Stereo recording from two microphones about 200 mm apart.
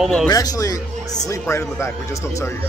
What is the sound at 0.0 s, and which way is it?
Speech, 5° left (ahead or behind).